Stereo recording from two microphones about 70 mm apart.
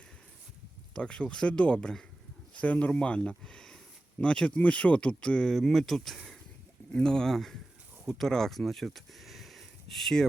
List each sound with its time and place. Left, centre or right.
0.9 s speech: centre
5.5 s speech: centre